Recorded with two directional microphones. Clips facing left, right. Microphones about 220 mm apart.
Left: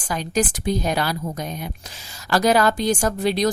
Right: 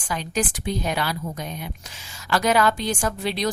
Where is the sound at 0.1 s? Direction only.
40° left (ahead or behind).